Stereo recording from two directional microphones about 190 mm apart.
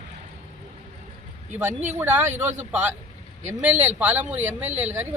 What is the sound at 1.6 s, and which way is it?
Speech, 10° right (ahead or behind).